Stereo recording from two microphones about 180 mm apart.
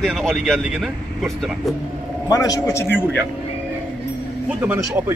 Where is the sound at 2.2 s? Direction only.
20° left (ahead or behind).